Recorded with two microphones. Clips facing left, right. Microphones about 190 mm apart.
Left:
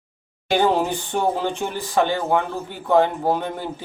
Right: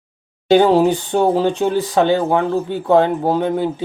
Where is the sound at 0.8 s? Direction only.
15° right (ahead or behind).